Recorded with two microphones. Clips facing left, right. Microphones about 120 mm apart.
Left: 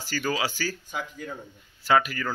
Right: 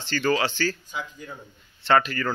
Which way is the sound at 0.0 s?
10° left (ahead or behind).